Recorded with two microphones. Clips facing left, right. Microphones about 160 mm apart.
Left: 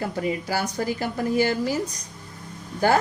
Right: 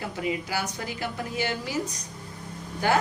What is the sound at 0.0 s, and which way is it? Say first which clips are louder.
A woman's voice: left 4 dB; 40° left (ahead or behind).